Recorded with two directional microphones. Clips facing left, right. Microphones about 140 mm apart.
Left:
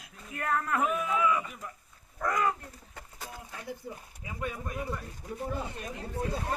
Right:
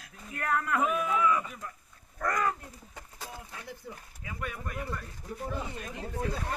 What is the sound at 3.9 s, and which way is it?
Speech, 25° left (ahead or behind).